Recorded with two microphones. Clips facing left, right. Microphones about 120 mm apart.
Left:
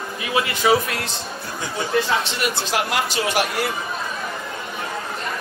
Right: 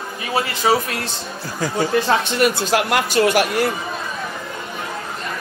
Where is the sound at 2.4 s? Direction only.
55° right (ahead or behind).